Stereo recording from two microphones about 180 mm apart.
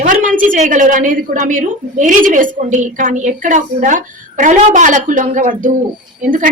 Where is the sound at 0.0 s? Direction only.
45° right (ahead or behind).